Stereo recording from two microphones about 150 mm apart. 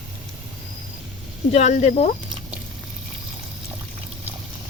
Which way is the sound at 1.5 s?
50° left (ahead or behind).